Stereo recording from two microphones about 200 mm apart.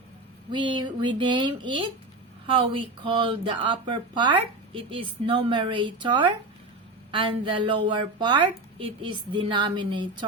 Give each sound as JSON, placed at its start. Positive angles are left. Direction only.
{"t": 0.5, "sound": "speech", "side_deg": -25}